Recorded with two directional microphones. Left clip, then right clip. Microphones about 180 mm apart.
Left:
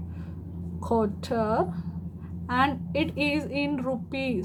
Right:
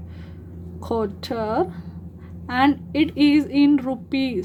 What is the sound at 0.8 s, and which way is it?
A woman's voice, 25° right (ahead or behind).